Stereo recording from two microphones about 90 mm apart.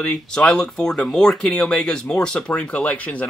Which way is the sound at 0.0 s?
10° left (ahead or behind).